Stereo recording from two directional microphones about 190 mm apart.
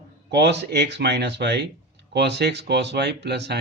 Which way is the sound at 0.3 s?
65° right (ahead or behind).